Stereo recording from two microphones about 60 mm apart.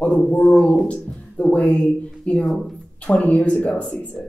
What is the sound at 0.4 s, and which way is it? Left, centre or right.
Speech, centre.